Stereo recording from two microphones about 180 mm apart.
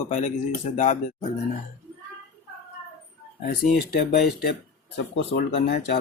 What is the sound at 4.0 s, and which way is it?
Speech, 60° left (ahead or behind).